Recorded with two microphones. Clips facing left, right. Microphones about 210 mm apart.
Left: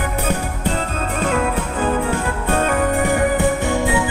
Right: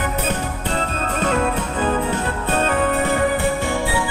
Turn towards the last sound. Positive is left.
turn(degrees=15)  # may be behind; listen again after turning